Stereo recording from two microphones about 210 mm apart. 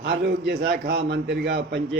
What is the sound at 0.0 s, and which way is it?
A man's voice, 55° right (ahead or behind).